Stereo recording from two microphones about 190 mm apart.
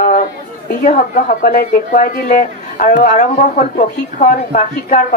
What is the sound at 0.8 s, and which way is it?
A woman's voice, 40° left (ahead or behind).